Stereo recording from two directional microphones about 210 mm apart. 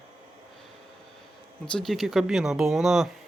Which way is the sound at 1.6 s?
Centre (ahead or behind).